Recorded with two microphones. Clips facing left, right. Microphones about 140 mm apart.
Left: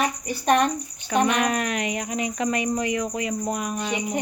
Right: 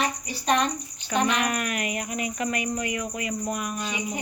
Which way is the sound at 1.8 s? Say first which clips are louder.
Left 3 dB; 30° left (ahead or behind).